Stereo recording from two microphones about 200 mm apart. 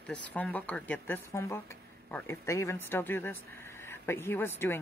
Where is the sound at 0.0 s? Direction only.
5° left (ahead or behind).